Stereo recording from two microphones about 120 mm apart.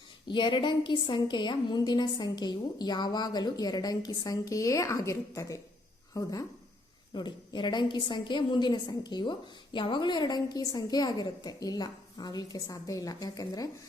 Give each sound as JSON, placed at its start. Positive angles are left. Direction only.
{"t": 0.3, "sound": "a woman's voice", "side_deg": 40}